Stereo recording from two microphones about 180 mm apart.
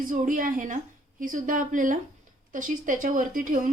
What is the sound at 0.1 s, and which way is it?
A woman's voice, 45° right (ahead or behind).